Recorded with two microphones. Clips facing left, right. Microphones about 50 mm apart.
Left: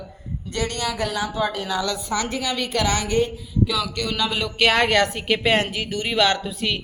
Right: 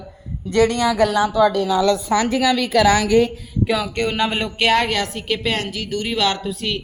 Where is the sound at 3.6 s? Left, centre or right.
Right.